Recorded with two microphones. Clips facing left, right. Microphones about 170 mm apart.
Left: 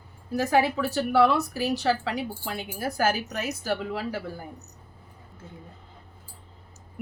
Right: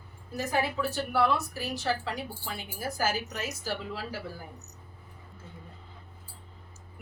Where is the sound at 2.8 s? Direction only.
60° left (ahead or behind).